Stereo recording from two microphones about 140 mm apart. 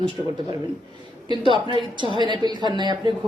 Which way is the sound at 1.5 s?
35° right (ahead or behind).